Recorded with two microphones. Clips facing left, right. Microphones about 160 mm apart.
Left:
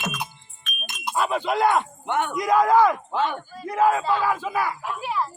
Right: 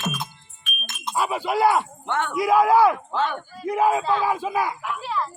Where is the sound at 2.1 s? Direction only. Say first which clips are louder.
Left 1 dB; 15° left (ahead or behind).